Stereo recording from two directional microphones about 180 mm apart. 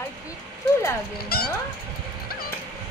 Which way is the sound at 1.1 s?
60° left (ahead or behind).